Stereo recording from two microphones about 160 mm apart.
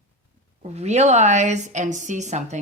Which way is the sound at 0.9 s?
45° right (ahead or behind).